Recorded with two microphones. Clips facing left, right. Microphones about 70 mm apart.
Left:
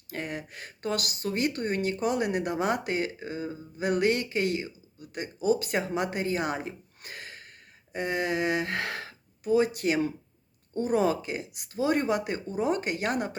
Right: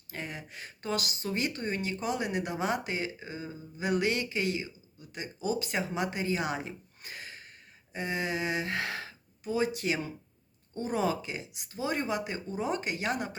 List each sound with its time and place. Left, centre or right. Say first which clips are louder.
0.1 s speech: left 5 dB; left